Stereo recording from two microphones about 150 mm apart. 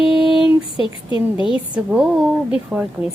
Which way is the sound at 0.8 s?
35° left (ahead or behind).